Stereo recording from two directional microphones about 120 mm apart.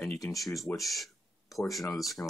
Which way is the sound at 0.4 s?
Centre (ahead or behind).